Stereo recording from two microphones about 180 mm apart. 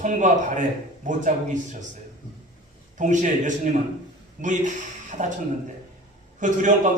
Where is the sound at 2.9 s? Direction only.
45° right (ahead or behind).